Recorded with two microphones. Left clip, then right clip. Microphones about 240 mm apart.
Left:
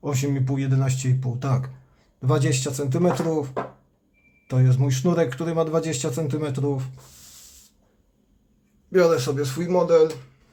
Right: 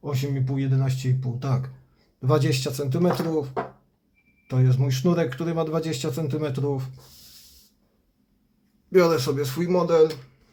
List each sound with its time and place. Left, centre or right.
0.0 s speech: centre
8.9 s speech: centre